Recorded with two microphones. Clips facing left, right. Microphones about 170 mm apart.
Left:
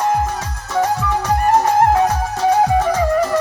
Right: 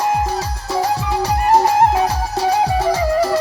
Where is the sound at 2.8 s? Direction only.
35° right (ahead or behind).